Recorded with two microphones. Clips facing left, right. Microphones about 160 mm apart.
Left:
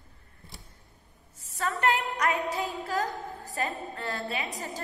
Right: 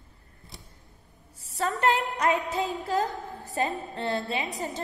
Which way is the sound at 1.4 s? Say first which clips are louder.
Right 3 dB; 30° right (ahead or behind).